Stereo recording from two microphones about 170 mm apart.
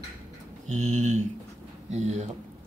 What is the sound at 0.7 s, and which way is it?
Speech, 45° right (ahead or behind).